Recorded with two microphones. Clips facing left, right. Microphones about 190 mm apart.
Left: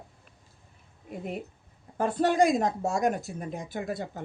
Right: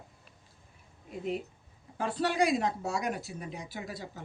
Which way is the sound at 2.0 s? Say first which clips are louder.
Left 5 dB; 50° left (ahead or behind).